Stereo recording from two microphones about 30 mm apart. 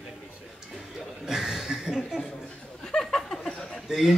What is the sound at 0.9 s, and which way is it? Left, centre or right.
Chuckle, centre.